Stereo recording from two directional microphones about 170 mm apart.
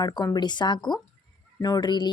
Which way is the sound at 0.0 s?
25° left (ahead or behind).